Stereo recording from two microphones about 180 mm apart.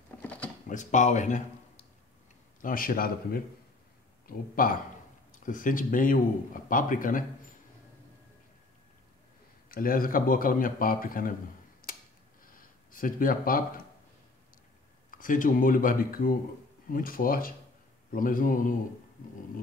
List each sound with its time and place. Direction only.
0.2 s typing: 10° left (ahead or behind)
0.7 s speech: 45° left (ahead or behind)
2.6 s speech: 50° left (ahead or behind)
9.7 s speech: 55° left (ahead or behind)
11.8 s tick-tock: 55° left (ahead or behind)
12.5 s a sound: 50° left (ahead or behind)
15.0 s speech: 50° left (ahead or behind)